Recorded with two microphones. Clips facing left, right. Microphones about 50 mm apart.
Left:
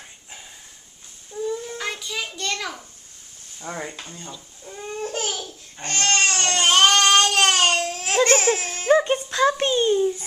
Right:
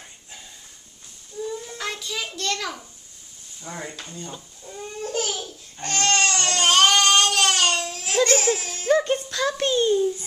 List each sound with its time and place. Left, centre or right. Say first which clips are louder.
1.5 s a sound: left 2 dB; centre
3.7 s speech: left 4 dB; left
4.8 s babbling: even; left
5.8 s speech: right 1 dB; left
6.1 s baby cry: left 1 dB; left
6.6 s baby cry: left 1 dB; centre
7.0 s baby cry: left 2 dB; left
8.9 s a child's voice: left 2 dB; left